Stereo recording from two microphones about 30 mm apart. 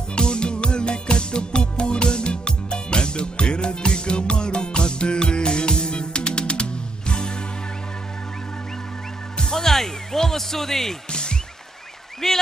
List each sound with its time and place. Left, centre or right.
0.1 s music: left
9.4 s music: centre
11.1 s music: left
12.2 s a sound: centre